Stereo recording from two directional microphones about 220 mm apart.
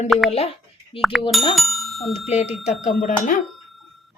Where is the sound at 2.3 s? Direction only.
30° left (ahead or behind).